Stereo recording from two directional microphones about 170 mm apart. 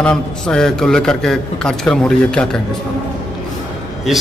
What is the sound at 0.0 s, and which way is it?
A man's voice, 5° left (ahead or behind).